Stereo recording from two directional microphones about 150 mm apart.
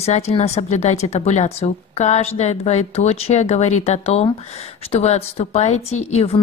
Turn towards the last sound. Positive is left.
turn(degrees=45)  # may be behind; listen again after turning